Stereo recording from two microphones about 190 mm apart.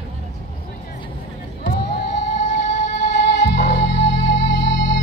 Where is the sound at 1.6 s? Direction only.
55° left (ahead or behind).